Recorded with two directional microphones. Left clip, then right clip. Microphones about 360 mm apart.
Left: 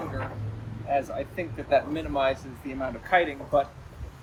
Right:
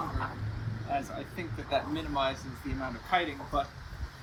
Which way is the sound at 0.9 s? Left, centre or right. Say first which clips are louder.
Left 8 dB; centre.